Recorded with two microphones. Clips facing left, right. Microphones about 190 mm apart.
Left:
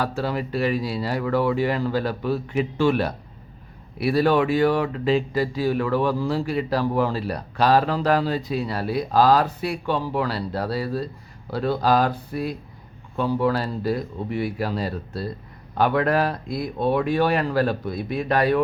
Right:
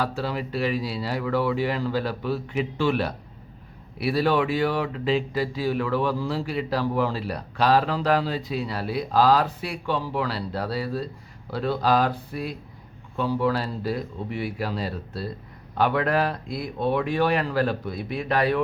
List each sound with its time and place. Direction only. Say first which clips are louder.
0.0 s speech: left 2 dB; 45° left (ahead or behind)